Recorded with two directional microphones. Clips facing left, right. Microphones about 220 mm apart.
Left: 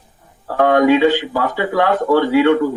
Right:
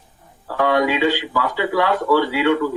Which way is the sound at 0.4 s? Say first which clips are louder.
Left 5 dB; 50° left (ahead or behind).